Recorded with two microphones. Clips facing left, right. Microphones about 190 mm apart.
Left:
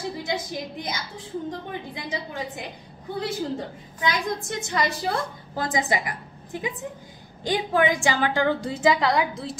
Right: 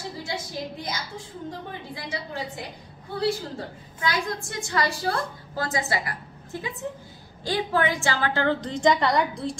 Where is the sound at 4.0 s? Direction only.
20° left (ahead or behind).